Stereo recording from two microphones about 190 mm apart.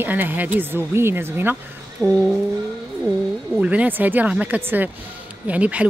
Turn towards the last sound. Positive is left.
turn(degrees=-5)  # may be behind; listen again after turning